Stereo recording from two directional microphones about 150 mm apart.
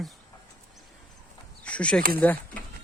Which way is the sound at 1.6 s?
10° left (ahead or behind).